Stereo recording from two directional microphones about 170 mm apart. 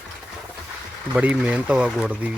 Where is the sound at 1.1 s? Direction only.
10° right (ahead or behind).